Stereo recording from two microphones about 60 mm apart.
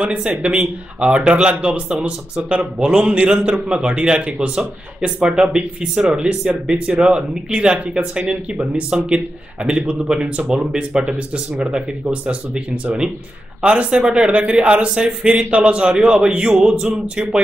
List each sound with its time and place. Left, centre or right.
0.0 s a man's voice: centre